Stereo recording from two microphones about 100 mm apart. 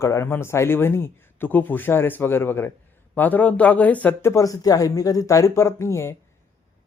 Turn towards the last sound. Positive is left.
turn(degrees=30)  # may be behind; listen again after turning